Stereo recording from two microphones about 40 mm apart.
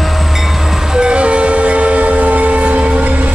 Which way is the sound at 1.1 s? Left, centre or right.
Right.